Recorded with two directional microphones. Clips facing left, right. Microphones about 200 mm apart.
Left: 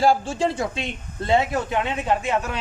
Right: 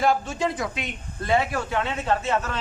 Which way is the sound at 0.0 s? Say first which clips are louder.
Left 3 dB; 30° left (ahead or behind).